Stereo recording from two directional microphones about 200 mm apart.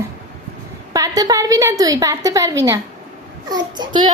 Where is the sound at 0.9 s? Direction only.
20° right (ahead or behind).